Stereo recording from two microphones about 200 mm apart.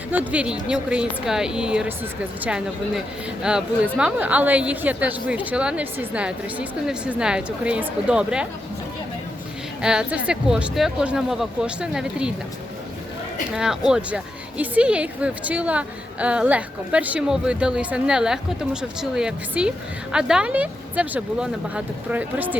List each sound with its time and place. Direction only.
0.1 s a woman's voice: 10° right (ahead or behind)
9.8 s a woman's voice: 5° right (ahead or behind)
13.6 s a woman's voice: 5° right (ahead or behind)